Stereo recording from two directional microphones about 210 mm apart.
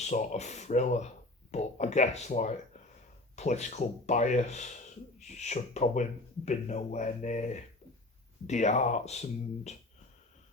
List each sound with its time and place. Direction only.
0.0 s speech: 35° left (ahead or behind)